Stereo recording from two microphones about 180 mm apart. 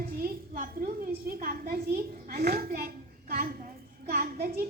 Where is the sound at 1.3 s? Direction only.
55° right (ahead or behind).